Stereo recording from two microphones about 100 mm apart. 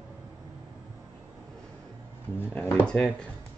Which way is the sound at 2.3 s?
20° left (ahead or behind).